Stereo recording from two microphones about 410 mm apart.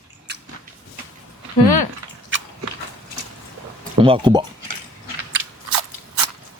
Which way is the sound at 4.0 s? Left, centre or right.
Centre.